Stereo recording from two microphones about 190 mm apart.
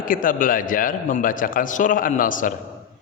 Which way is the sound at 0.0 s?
45° left (ahead or behind).